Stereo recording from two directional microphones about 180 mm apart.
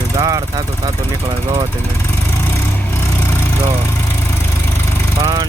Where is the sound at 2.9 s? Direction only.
15° left (ahead or behind).